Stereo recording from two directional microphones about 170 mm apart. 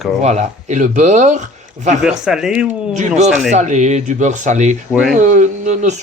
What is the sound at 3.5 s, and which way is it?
Speech, 45° right (ahead or behind).